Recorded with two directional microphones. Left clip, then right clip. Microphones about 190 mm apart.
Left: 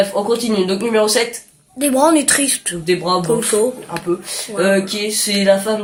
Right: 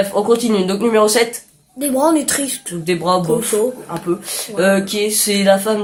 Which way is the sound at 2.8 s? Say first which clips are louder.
Right 1 dB; 40° right (ahead or behind).